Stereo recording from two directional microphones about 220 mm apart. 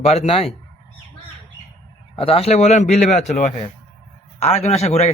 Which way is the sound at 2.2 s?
25° left (ahead or behind).